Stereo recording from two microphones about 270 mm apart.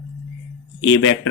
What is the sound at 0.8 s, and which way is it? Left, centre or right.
Speech, left.